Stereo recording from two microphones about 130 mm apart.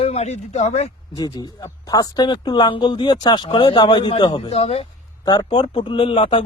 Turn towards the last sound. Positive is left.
turn(degrees=45)  # may be behind; listen again after turning